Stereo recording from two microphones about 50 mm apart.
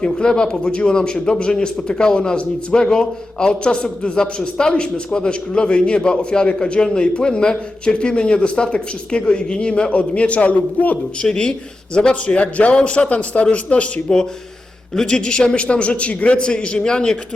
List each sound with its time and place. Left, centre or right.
0.0 s a man's voice: centre
11.2 s a man's voice: centre